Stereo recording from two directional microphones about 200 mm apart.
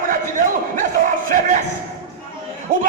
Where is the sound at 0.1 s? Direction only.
40° right (ahead or behind).